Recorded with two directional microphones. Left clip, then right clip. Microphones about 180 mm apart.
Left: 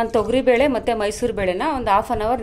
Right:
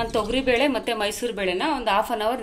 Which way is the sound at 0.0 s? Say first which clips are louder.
Left 5 dB; 65° left (ahead or behind).